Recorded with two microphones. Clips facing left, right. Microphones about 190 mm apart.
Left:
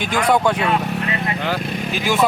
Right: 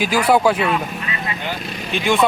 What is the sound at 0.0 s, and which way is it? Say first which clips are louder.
Speech: right 2 dB; 5° right (ahead or behind).